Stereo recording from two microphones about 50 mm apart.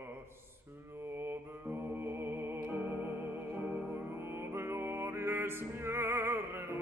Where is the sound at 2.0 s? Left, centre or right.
Right.